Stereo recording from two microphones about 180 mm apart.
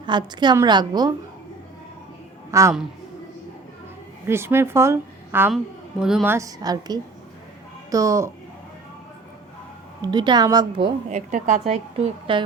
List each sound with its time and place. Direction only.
0.0 s a woman's voice: 25° right (ahead or behind)
2.5 s a woman's voice: 15° right (ahead or behind)
4.3 s a woman's voice: 15° right (ahead or behind)
6.3 s a woman's voice: 20° right (ahead or behind)
10.0 s a woman's voice: 25° right (ahead or behind)
11.1 s a woman's voice: 45° right (ahead or behind)
12.3 s a woman's voice: 30° right (ahead or behind)